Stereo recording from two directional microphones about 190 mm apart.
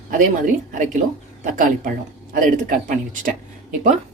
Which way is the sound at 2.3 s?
45° right (ahead or behind).